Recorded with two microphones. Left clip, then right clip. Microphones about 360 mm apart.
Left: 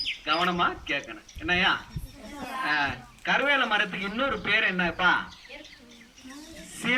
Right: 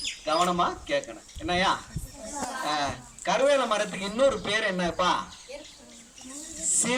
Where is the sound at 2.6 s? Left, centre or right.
Centre.